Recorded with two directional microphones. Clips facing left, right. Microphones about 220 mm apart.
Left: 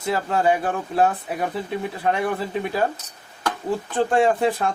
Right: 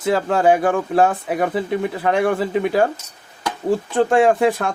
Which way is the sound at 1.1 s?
60° right (ahead or behind).